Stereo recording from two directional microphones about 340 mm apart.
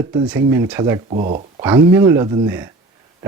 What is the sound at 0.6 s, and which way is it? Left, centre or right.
Speech, centre.